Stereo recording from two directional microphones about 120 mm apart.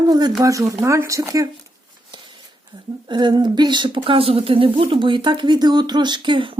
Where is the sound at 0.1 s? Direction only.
35° right (ahead or behind).